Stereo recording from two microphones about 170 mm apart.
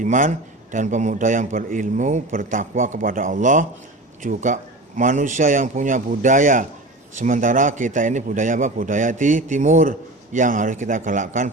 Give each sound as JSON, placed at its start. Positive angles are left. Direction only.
{"t": 0.0, "sound": "a man's voice", "side_deg": -50}